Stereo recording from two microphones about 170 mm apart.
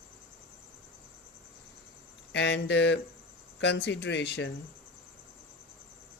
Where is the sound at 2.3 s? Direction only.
90° left.